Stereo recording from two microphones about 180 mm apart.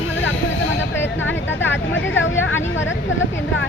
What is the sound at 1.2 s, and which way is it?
Speech, 90° left.